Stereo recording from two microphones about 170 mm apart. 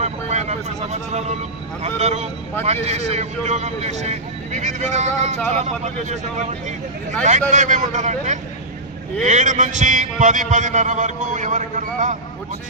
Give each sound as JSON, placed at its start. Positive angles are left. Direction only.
{"t": 0.0, "sound": "a man's voice", "side_deg": -40}
{"t": 7.3, "sound": "a man's voice", "side_deg": -45}